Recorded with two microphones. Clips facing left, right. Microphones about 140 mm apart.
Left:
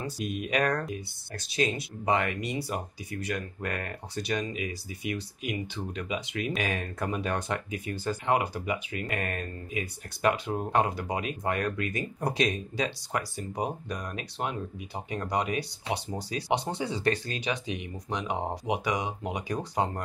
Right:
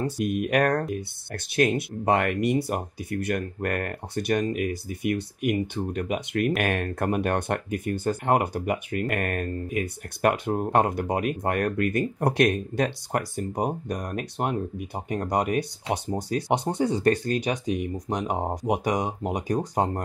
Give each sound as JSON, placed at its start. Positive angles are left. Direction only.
{"t": 0.0, "sound": "speech", "side_deg": -55}